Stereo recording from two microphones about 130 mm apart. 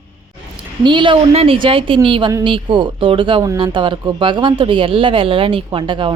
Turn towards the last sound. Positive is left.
turn(degrees=-40)  # may be behind; listen again after turning